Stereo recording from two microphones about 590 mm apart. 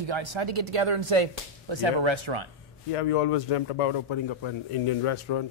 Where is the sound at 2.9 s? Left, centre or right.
Left.